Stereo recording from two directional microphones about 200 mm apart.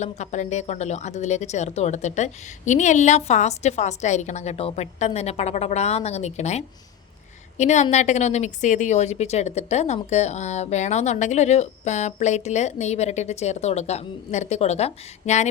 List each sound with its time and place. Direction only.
0.0 s a woman's voice: 35° left (ahead or behind)